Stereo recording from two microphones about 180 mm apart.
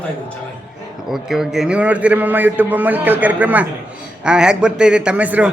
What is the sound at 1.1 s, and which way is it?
A man's voice, centre (ahead or behind).